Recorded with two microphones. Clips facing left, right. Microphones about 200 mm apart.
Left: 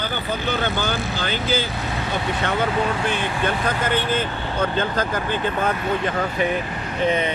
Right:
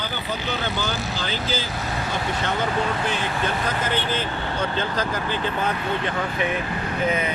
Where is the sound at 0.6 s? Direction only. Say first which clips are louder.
Left 3 dB; 55° left (ahead or behind).